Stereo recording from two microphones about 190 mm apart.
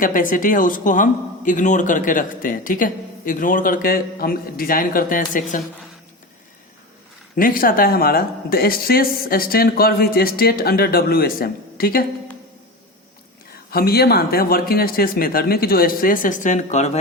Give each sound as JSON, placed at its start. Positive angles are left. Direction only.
{"t": 0.0, "sound": "speech", "side_deg": 45}
{"t": 7.3, "sound": "speech", "side_deg": 50}
{"t": 13.7, "sound": "speech", "side_deg": 55}